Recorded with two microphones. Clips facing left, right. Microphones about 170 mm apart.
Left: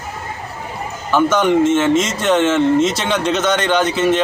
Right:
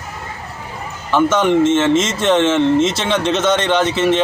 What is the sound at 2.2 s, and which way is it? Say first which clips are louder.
Speech: right 1 dB; 5° left (ahead or behind).